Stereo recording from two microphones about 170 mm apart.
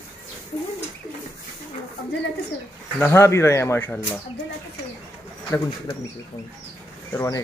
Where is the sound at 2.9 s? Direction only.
15° left (ahead or behind).